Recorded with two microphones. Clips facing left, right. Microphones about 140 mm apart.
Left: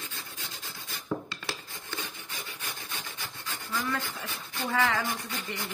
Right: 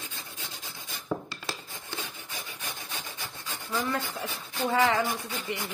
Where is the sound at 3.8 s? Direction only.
15° right (ahead or behind).